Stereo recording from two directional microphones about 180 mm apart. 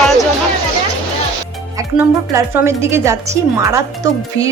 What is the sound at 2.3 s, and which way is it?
Speech, 15° right (ahead or behind).